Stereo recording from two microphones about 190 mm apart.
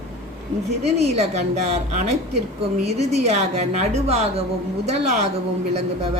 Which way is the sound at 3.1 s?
35° right (ahead or behind).